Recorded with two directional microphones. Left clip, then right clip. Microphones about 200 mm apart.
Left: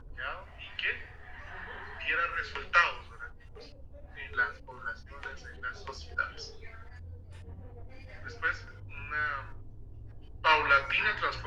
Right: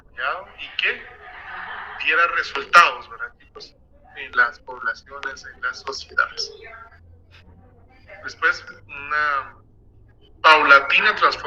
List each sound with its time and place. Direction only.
0.2 s a sound: 65° right (ahead or behind)
4.1 s speech: 65° right (ahead or behind)
8.2 s speech: 60° right (ahead or behind)